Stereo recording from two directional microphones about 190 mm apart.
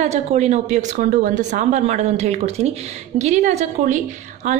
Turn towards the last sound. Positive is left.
turn(degrees=-40)  # may be behind; listen again after turning